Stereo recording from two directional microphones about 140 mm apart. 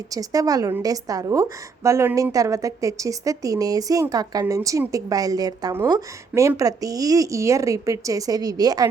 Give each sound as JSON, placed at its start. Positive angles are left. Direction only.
{"t": 0.1, "sound": "a woman's voice", "side_deg": -25}